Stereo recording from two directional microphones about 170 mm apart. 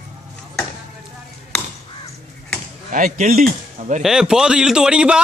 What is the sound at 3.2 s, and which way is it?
Speech, 45° right (ahead or behind).